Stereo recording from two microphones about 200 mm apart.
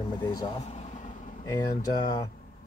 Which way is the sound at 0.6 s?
35° left (ahead or behind).